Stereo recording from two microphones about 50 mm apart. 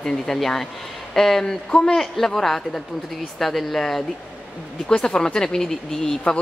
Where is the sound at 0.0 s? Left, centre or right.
Centre.